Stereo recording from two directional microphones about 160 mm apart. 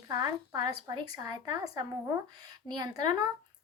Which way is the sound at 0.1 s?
25° right (ahead or behind).